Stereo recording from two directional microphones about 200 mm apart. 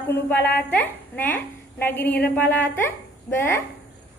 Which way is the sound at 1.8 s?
10° left (ahead or behind).